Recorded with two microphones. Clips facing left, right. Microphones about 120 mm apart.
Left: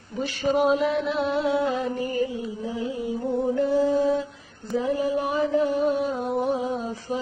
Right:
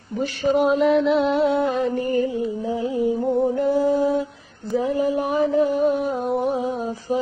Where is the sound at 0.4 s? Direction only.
60° right (ahead or behind).